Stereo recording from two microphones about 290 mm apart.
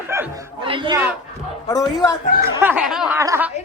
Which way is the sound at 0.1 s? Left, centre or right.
Centre.